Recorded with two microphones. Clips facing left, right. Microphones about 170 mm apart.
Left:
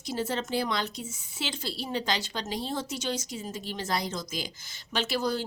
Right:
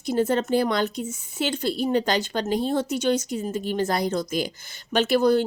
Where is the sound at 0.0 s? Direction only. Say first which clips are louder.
Right 9 dB; 55° right (ahead or behind).